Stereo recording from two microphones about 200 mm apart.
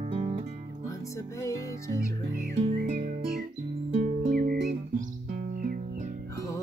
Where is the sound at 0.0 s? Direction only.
35° right (ahead or behind).